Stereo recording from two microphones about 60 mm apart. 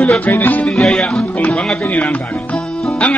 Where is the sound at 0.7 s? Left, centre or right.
Centre.